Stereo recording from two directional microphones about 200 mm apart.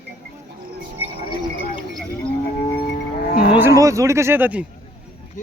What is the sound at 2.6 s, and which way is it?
Music, 30° left (ahead or behind).